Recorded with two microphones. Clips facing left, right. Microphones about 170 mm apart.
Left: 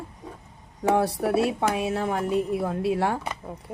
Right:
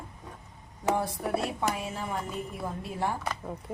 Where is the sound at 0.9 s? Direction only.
75° left (ahead or behind).